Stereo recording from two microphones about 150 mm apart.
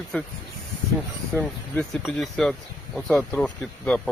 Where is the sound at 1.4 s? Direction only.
10° left (ahead or behind).